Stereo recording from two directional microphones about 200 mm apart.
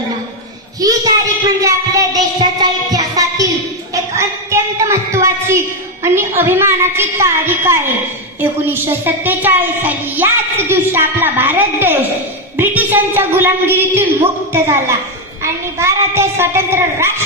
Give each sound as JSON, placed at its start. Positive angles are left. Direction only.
{"t": 0.7, "sound": "a child's voice", "side_deg": -20}
{"t": 1.6, "sound": "child singing", "side_deg": -15}
{"t": 6.0, "sound": "a woman's voice", "side_deg": -10}